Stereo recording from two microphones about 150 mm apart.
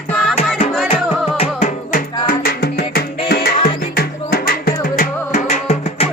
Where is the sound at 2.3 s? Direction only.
90° left; by 6.1 s 45° left (ahead or behind).